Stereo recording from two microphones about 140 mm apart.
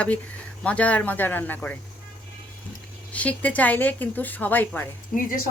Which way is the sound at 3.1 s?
10° left (ahead or behind).